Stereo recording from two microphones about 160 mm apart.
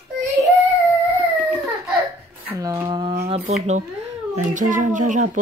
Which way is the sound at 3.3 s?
45° right (ahead or behind).